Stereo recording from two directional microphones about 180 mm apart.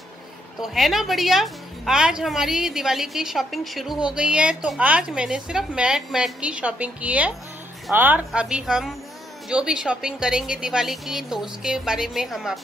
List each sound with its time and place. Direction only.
0.6 s a woman's voice: centre (ahead or behind)